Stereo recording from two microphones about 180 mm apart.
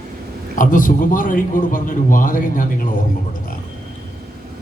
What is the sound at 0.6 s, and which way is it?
A man's voice, 50° left (ahead or behind).